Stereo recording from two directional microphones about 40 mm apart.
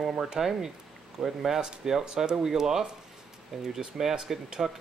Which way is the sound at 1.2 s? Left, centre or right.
Centre.